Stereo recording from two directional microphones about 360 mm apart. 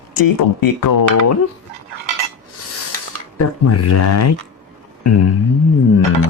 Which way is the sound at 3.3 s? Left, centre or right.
Left.